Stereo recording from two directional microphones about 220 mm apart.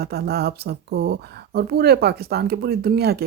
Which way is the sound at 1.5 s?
45° right (ahead or behind).